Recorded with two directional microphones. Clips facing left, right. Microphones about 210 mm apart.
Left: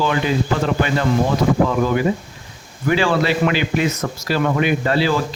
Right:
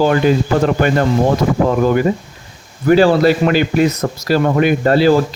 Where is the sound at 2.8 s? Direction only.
40° right (ahead or behind).